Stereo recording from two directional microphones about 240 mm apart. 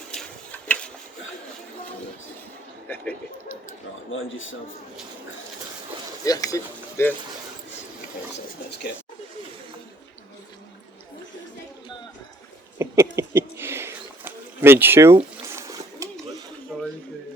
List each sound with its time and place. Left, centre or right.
2.8 s speech: centre
4.1 s a man's voice: left
6.2 s speech: centre
12.8 s a sound: centre
16.7 s dishes: centre